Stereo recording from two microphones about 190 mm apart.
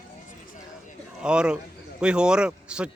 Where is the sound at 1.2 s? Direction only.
5° right (ahead or behind).